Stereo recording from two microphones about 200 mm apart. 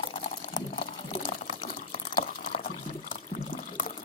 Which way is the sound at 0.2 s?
40° left (ahead or behind).